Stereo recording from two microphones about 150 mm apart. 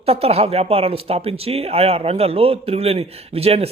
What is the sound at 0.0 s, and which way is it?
Speech, 40° right (ahead or behind).